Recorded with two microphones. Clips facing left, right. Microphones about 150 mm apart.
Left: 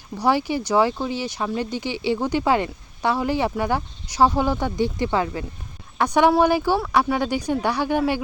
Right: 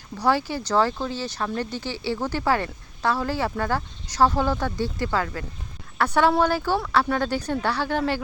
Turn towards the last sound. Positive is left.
turn(degrees=15)  # may be behind; listen again after turning